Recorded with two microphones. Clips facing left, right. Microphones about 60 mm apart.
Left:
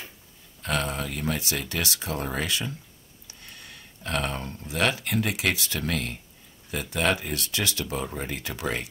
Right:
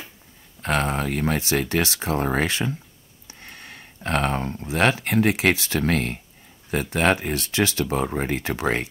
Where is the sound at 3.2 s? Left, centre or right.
Right.